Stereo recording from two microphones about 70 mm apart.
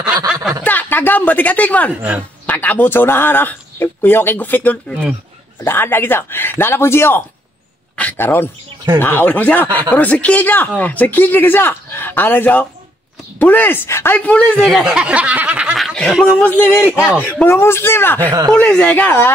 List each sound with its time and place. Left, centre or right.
0.3 s snicker: centre
0.7 s speech: left
2.0 s speech: right
2.4 s speech: left
5.6 s a man's voice: left
7.9 s a sound: left
8.2 s a man's voice: left
14.1 s a man's voice: centre
14.7 s speech: centre
15.7 s speech: centre
16.3 s speech: left
17.5 s a man's voice: left
18.5 s speech: centre; by 19.3 s left